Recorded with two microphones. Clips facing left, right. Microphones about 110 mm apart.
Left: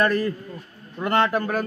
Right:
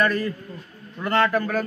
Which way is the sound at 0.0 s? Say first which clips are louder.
Left 1 dB; 40° left (ahead or behind).